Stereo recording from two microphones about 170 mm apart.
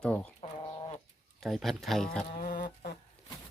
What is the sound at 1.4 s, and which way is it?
Speech, centre (ahead or behind).